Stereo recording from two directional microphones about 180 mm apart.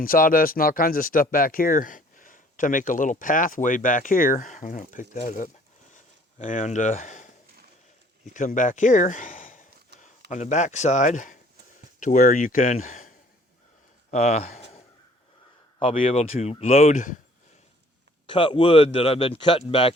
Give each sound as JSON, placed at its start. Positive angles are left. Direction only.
{"t": 0.0, "sound": "speech", "side_deg": 50}
{"t": 15.8, "sound": "speech", "side_deg": 30}
{"t": 18.3, "sound": "speech", "side_deg": 30}